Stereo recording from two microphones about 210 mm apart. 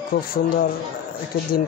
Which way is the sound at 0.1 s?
50° left (ahead or behind).